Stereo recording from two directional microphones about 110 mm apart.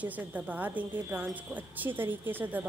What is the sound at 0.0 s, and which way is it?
A woman's voice, 15° right (ahead or behind).